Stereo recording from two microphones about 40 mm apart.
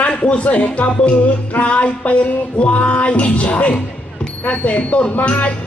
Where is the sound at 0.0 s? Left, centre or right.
Left.